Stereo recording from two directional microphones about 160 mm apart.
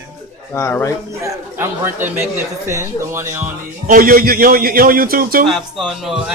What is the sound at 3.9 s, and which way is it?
A man's voice, 65° right (ahead or behind).